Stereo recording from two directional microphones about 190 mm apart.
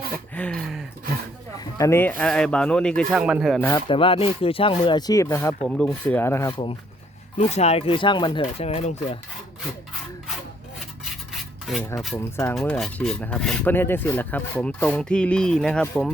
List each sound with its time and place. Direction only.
0.3 s a sound: 5° left (ahead or behind)
1.5 s filing: 15° left (ahead or behind); by 3.6 s 5° right (ahead or behind)
3.6 s speech: 15° left (ahead or behind)
3.8 s speech: 30° left (ahead or behind)
5.6 s speech: 5° left (ahead or behind)
7.3 s speech: 35° left (ahead or behind)
11.8 s speech: 15° left (ahead or behind)
12.5 s filing: centre (ahead or behind)